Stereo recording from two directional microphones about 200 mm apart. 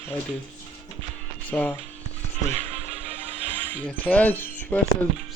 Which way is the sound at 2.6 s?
30° right (ahead or behind).